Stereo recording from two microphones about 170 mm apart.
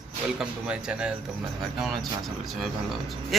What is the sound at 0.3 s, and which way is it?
A man's voice, 5° right (ahead or behind).